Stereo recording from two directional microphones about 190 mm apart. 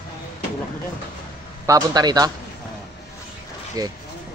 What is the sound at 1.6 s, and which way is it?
Speech, 20° right (ahead or behind).